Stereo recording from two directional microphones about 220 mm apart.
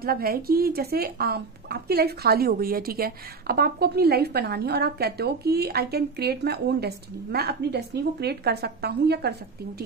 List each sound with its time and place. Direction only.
0.0 s speech: 45° right (ahead or behind)